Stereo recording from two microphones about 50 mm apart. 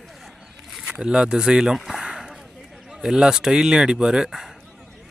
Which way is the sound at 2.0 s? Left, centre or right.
Centre.